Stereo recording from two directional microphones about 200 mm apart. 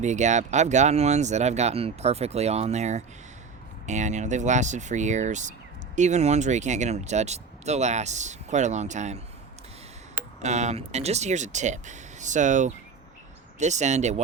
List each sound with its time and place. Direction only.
0.0 s speech: 35° right (ahead or behind)
10.4 s speech: 35° right (ahead or behind)